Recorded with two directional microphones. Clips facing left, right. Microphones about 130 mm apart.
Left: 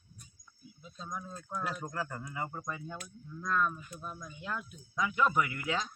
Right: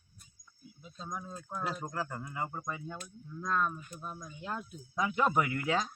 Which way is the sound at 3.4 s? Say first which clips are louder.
Even; 25° right (ahead or behind).